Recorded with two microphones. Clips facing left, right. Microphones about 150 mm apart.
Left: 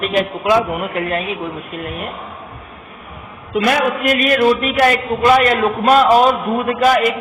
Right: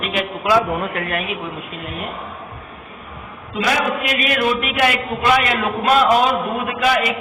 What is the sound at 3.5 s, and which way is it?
A man's voice, 55° left (ahead or behind).